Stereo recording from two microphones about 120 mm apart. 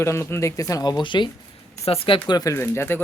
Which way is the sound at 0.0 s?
20° left (ahead or behind).